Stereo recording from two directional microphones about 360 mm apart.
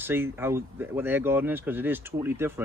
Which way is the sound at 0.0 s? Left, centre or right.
Centre.